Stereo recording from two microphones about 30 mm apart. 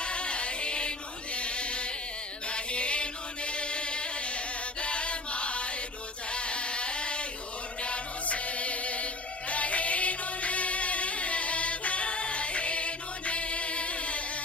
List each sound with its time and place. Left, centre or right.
0.0 s music: left
2.5 s chant: left
6.3 s a sound: left
7.8 s music: left